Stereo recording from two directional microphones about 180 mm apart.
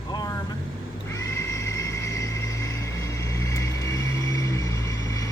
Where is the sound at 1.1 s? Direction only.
15° left (ahead or behind).